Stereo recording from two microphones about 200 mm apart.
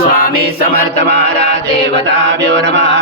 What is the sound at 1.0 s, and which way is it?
Mantra, 55° right (ahead or behind).